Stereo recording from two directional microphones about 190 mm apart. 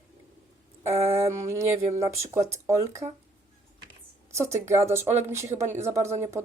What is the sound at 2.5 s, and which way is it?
Speech, 15° right (ahead or behind).